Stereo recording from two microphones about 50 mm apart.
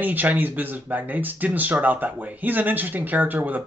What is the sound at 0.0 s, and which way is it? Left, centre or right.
Speech, right.